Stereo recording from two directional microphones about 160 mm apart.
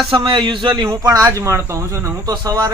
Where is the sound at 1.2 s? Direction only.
20° right (ahead or behind).